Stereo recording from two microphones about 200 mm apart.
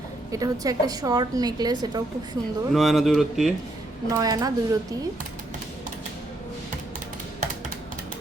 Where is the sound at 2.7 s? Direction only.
Centre (ahead or behind).